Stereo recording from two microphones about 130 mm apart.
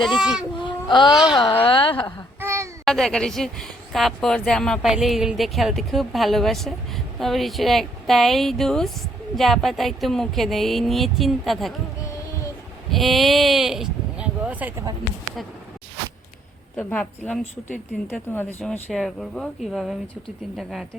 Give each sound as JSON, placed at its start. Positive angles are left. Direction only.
{"t": 0.0, "sound": "speech", "side_deg": 0}
{"t": 0.6, "sound": "babbling", "side_deg": 35}
{"t": 1.3, "sound": "a woman's voice", "side_deg": 35}
{"t": 2.4, "sound": "a sound", "side_deg": -20}
{"t": 2.8, "sound": "speech", "side_deg": 5}
{"t": 12.9, "sound": "speech", "side_deg": 0}
{"t": 16.7, "sound": "a woman's voice", "side_deg": 10}
{"t": 18.6, "sound": "speech", "side_deg": 5}